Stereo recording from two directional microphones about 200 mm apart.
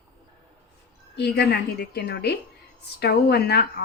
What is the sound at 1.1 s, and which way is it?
A woman's voice, 55° left (ahead or behind).